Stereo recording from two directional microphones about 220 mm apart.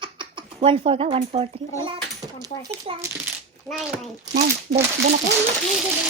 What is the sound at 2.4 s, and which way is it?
Speech, 20° right (ahead or behind).